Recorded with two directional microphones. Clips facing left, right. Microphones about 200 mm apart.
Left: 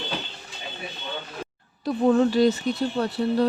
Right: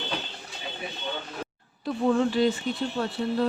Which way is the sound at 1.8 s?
40° left (ahead or behind).